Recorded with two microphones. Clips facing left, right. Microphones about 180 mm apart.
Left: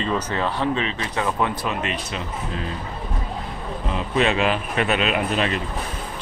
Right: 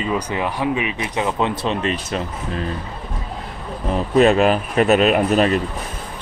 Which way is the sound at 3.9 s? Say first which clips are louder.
Right 7 dB; 45° right (ahead or behind).